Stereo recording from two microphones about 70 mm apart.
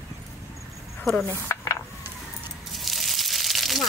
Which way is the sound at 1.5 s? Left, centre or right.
Left.